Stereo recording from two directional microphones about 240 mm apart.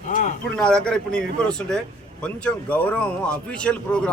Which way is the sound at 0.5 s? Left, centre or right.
Centre.